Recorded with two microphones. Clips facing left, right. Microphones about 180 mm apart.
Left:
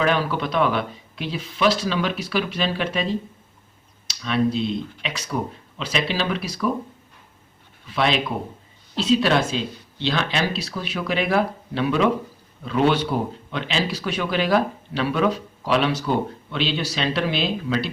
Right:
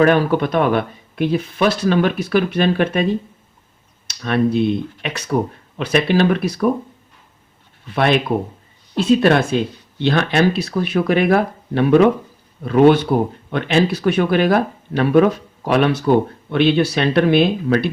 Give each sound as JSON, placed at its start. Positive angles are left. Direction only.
{"t": 0.0, "sound": "speech", "side_deg": -50}
{"t": 7.9, "sound": "speech", "side_deg": -55}